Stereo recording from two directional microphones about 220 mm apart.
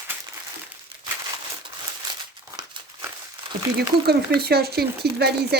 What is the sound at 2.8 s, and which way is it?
Crumpling, 20° right (ahead or behind).